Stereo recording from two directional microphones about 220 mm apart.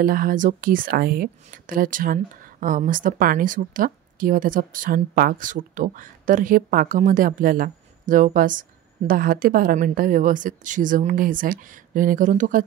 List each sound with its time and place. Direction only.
0.0 s speech: 40° right (ahead or behind)